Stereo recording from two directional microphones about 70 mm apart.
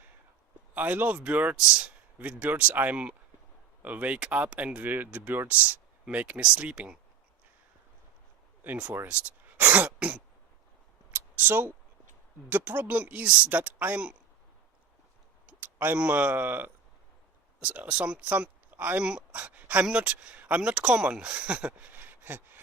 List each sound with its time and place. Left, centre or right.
0.7 s speech: right
2.1 s speech: right
8.6 s speech: right
11.1 s a sound: right
12.5 s speech: right
15.4 s a sound: right
16.0 s speech: right
17.6 s speech: centre
19.0 s speech: centre